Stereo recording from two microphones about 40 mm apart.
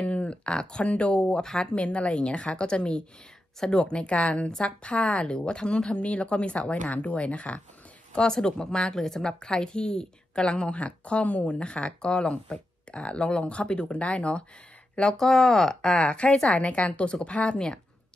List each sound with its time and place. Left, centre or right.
0.0 s speech: left
0.8 s a woman's voice: left
1.4 s speech: centre
1.9 s a woman's voice: left
8.1 s a woman's voice: left
10.7 s a woman's voice: left
15.1 s speech: centre
16.0 s a woman's voice: left